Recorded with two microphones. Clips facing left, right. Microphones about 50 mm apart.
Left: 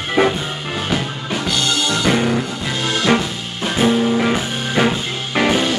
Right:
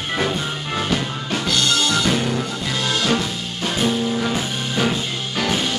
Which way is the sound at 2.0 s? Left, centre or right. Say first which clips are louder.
Left 4 dB; left.